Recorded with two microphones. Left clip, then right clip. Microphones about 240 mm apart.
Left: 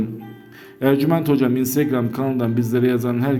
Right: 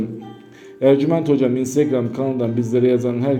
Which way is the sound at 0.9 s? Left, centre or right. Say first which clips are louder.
Right 3 dB; left.